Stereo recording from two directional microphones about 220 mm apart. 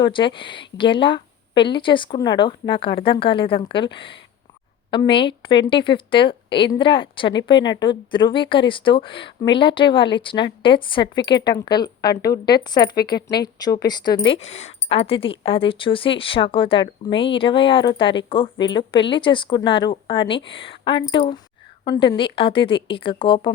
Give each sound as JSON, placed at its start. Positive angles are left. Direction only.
{"t": 0.0, "sound": "speech", "side_deg": 20}
{"t": 13.2, "sound": "speech", "side_deg": 15}
{"t": 14.3, "sound": "speech", "side_deg": 30}